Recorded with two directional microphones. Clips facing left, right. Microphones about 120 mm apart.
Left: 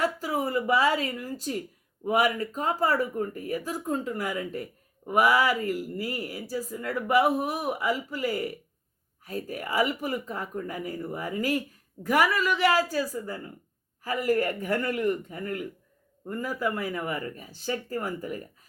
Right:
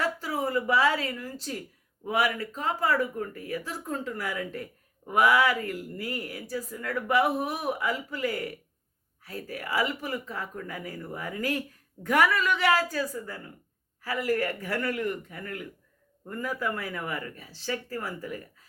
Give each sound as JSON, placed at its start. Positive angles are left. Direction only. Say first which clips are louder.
{"t": 0.0, "sound": "speech", "louder": "left 2 dB", "side_deg": 15}
{"t": 2.7, "sound": "speech", "louder": "left 1 dB", "side_deg": 40}
{"t": 3.2, "sound": "speech", "louder": "left 3 dB", "side_deg": 20}
{"t": 14.9, "sound": "a man's voice", "louder": "left 4 dB", "side_deg": 30}
{"t": 16.4, "sound": "speech", "louder": "left 2 dB", "side_deg": 15}